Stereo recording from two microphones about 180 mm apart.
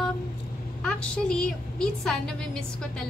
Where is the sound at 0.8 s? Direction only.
5° left (ahead or behind).